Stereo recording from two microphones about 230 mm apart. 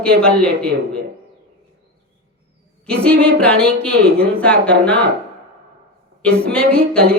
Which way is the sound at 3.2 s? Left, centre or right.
Centre.